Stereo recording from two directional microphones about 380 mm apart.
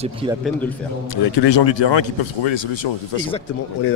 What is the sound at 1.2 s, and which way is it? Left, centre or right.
Speech, left.